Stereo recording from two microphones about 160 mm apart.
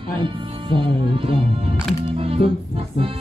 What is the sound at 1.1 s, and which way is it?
Speech, 35° right (ahead or behind).